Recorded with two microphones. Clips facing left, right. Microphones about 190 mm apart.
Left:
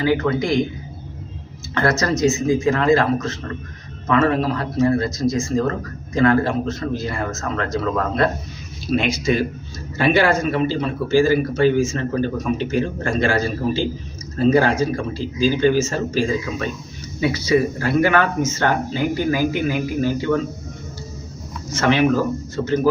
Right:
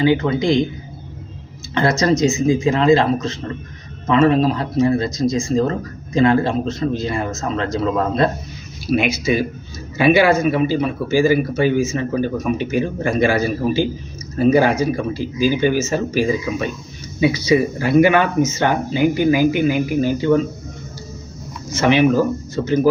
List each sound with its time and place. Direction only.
0.0 s speech: 20° right (ahead or behind)
1.7 s speech: 20° right (ahead or behind)
8.9 s speech: 5° right (ahead or behind)
21.7 s speech: 15° right (ahead or behind)